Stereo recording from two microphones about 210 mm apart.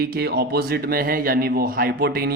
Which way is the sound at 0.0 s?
50° right (ahead or behind).